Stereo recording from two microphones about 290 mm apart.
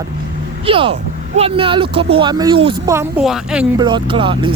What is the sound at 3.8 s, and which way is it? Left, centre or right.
Speech, centre.